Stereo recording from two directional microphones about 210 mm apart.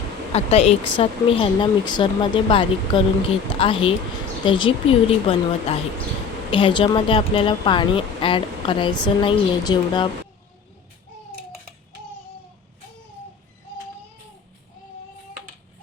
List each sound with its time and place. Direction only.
0.3 s speech: 30° left (ahead or behind)